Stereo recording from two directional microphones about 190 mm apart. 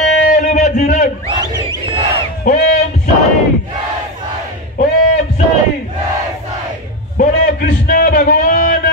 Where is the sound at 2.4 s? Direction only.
50° left (ahead or behind).